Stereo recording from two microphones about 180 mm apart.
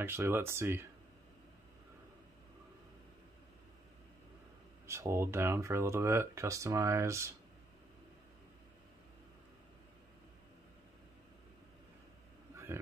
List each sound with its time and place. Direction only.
0.0 s speech: 15° right (ahead or behind)
4.8 s speech: 15° right (ahead or behind)